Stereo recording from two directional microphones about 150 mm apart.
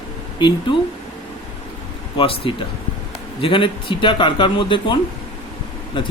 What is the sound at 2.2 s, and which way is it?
Speech, 40° left (ahead or behind).